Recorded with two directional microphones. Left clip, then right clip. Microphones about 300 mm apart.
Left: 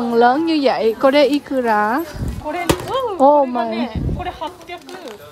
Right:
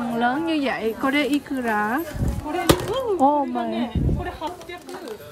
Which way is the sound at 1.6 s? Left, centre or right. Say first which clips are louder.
Left 8 dB; right.